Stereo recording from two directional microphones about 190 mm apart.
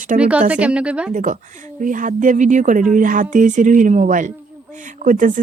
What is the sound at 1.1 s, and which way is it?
Speech, 45° right (ahead or behind).